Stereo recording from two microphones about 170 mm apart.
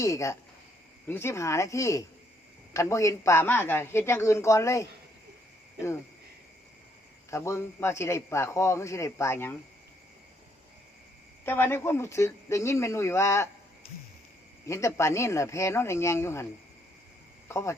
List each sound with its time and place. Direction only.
0.0 s a man's voice: 20° left (ahead or behind)
7.3 s a man's voice: 15° left (ahead or behind)
11.4 s a man's voice: 10° left (ahead or behind)
14.7 s a man's voice: 15° left (ahead or behind)
17.5 s a man's voice: 15° left (ahead or behind)